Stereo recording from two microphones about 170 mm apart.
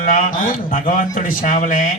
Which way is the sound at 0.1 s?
50° left (ahead or behind).